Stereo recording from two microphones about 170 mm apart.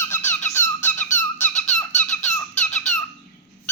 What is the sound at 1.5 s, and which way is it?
Squeak, 45° left (ahead or behind).